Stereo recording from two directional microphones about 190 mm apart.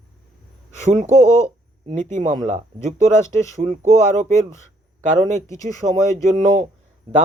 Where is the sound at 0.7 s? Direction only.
40° right (ahead or behind).